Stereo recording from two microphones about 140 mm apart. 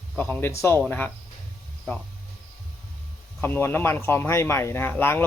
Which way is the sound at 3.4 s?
15° left (ahead or behind).